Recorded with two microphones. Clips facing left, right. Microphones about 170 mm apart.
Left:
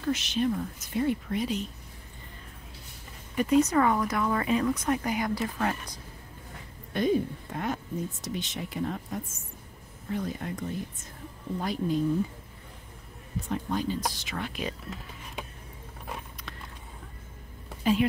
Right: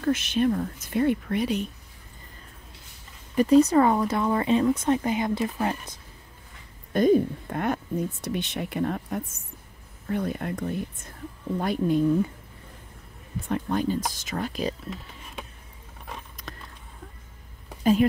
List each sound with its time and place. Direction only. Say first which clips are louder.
0.0 s a woman's voice: right 4 dB; 55° right (ahead or behind)
3.3 s speech: right 5 dB; 35° right (ahead or behind)
6.9 s a woman's voice: right 6 dB; 45° right (ahead or behind)
13.5 s a woman's voice: right 4 dB; 55° right (ahead or behind)
14.1 s speech: right 5 dB; 40° right (ahead or behind)